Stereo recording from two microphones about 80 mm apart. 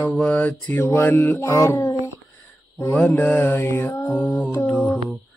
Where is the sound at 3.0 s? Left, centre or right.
Left.